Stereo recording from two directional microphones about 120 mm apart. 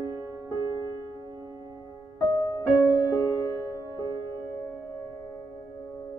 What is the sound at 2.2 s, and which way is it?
Music, 35° left (ahead or behind).